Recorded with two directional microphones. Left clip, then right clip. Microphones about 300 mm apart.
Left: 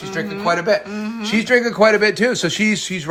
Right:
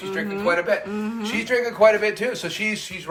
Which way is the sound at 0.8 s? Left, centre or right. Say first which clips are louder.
Left 1 dB; centre.